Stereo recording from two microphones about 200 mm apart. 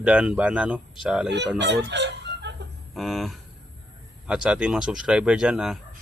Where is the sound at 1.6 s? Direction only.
60° right (ahead or behind).